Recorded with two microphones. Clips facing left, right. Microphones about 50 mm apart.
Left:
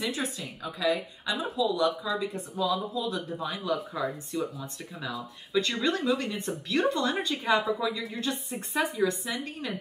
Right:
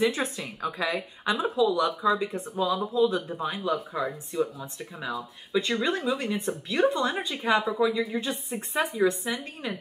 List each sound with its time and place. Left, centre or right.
0.0 s a woman's voice: right
4.3 s speech: centre
7.6 s speech: centre